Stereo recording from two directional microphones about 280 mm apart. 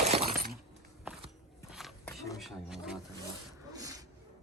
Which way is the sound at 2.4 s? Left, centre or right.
Centre.